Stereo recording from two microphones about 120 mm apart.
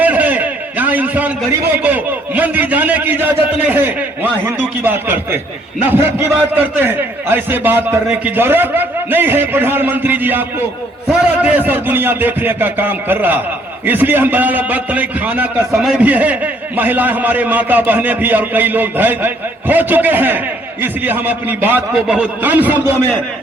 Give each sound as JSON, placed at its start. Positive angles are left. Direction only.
{"t": 0.0, "sound": "a sound", "side_deg": -15}
{"t": 1.7, "sound": "a man's voice", "side_deg": -15}
{"t": 15.7, "sound": "speech", "side_deg": -5}
{"t": 16.0, "sound": "a man's voice", "side_deg": -15}